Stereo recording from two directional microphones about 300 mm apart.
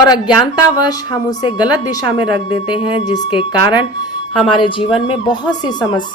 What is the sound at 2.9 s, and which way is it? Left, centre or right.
Speech, centre.